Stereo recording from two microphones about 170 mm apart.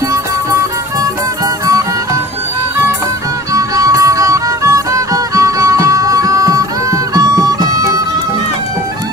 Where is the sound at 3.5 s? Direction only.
20° right (ahead or behind).